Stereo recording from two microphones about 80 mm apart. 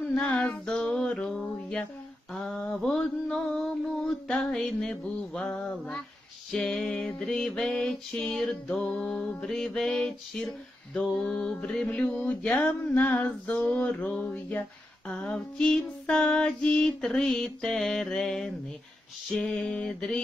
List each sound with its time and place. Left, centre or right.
0.1 s female singing: centre
2.3 s mantra: centre
6.5 s a sound: centre